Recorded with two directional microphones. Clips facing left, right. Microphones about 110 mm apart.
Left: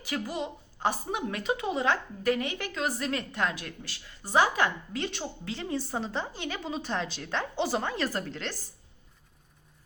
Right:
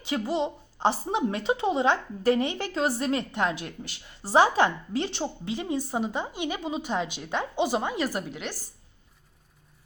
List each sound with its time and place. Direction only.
0.0 s a woman's voice: 25° right (ahead or behind)